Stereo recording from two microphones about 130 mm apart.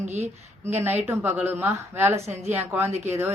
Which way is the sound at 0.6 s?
15° right (ahead or behind).